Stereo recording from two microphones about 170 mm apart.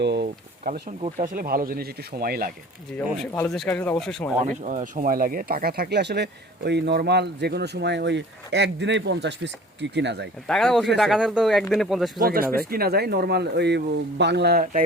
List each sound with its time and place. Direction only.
0.0 s speech: 90° right
0.6 s speech: 50° right (ahead or behind)
2.9 s speech: 5° left (ahead or behind)
4.4 s speech: 50° right (ahead or behind); by 10.2 s 90° right
10.4 s speech: 5° left (ahead or behind)
12.2 s speech: 60° right (ahead or behind)